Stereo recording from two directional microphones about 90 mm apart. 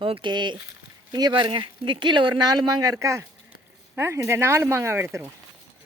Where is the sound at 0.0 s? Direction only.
70° right (ahead or behind); by 2.6 s 55° right (ahead or behind).